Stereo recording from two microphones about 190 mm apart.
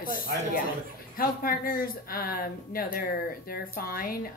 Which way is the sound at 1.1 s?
50° left (ahead or behind).